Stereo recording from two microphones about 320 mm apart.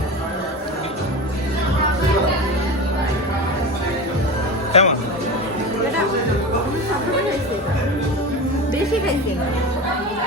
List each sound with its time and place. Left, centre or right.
4.7 s music: centre